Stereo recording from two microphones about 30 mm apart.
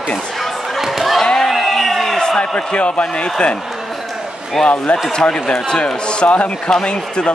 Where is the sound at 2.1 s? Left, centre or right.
Left.